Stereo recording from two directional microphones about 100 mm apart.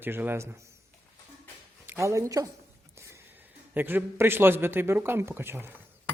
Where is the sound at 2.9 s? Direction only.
30° right (ahead or behind).